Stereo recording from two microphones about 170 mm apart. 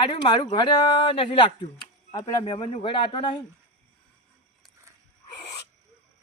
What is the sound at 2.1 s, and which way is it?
Speech, 20° left (ahead or behind).